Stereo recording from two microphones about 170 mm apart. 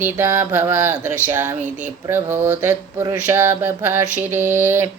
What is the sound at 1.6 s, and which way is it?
Speech, 45° right (ahead or behind).